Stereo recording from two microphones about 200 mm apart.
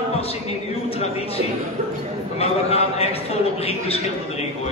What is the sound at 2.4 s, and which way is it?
Speech, 30° left (ahead or behind).